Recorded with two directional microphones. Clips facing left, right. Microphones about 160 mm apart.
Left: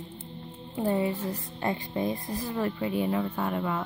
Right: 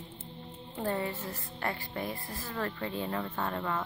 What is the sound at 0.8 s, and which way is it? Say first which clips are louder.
Music: left 6 dB; 15° left (ahead or behind).